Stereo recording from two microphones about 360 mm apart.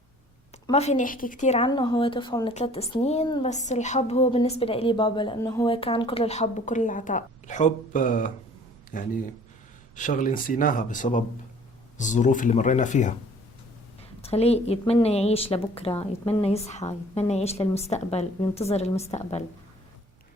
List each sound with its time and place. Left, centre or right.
0.7 s speech: centre
14.2 s speech: centre